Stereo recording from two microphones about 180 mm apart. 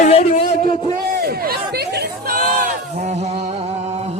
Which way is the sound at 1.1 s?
60° right (ahead or behind).